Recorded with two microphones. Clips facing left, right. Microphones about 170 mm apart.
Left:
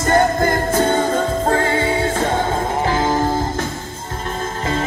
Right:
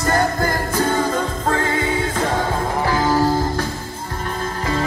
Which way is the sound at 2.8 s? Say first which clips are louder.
Right 2 dB; 25° left (ahead or behind).